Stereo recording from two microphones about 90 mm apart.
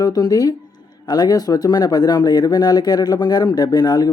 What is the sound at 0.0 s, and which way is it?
Speech, 45° left (ahead or behind).